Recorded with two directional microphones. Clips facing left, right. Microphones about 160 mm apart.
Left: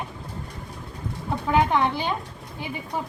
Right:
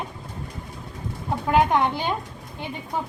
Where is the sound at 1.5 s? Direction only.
15° right (ahead or behind).